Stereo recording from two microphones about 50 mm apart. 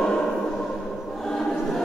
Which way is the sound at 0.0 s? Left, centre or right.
Centre.